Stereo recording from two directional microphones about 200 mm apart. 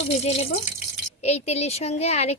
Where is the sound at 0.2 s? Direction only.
30° left (ahead or behind).